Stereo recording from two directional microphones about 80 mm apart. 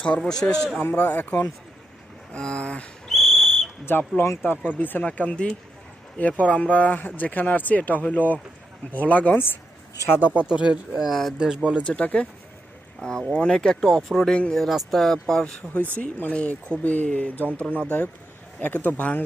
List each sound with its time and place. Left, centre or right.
0.0 s speech: centre
0.9 s speech: centre
3.1 s whistle: centre
4.2 s speech: left
10.2 s speech: centre
11.8 s speech: centre
13.3 s speech: centre
16.0 s speech: centre